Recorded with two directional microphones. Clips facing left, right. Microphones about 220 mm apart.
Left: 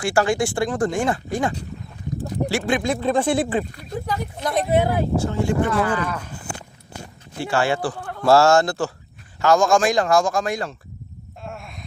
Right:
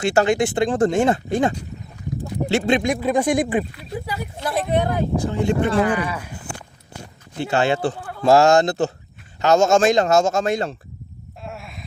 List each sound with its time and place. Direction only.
0.0 s speech: 25° right (ahead or behind)
4.7 s speech: 5° left (ahead or behind)
5.1 s speech: 15° right (ahead or behind)
7.3 s speech: 20° right (ahead or behind)
11.4 s a sound: centre (ahead or behind)